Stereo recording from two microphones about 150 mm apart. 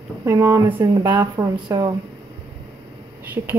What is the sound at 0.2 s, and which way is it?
Speech, 20° right (ahead or behind).